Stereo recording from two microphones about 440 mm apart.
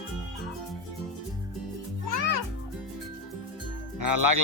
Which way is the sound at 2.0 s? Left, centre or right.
Right.